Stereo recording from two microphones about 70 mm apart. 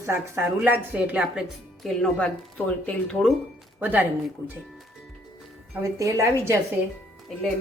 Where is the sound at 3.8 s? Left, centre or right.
Right.